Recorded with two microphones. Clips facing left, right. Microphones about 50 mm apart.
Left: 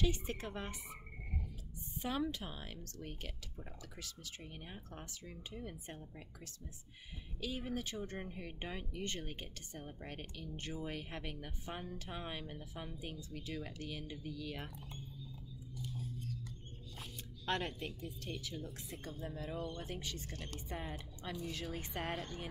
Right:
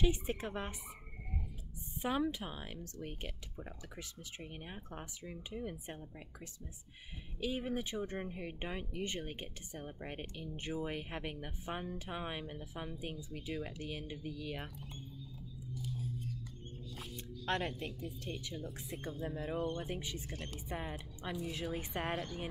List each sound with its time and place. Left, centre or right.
0.0 s speech: centre
2.0 s speech: centre
15.7 s whispering: centre
17.5 s speech: centre
19.1 s speech: right